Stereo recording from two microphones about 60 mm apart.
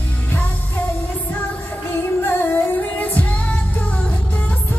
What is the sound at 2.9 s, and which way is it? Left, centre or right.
Music, left.